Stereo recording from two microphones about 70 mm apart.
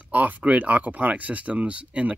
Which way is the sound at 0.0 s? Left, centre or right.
Right.